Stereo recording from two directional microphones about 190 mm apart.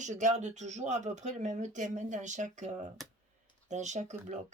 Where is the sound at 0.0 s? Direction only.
40° right (ahead or behind).